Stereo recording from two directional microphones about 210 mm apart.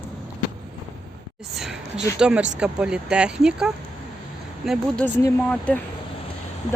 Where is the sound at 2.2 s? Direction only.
5° right (ahead or behind).